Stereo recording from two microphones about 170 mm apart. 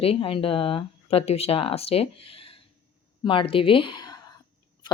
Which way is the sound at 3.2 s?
30° left (ahead or behind).